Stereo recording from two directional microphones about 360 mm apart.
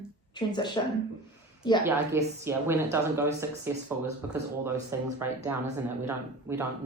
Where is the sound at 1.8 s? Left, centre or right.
Centre.